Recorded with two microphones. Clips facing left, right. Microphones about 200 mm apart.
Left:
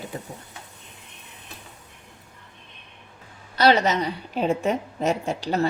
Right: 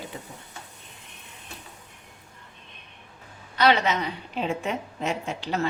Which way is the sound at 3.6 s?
40° left (ahead or behind).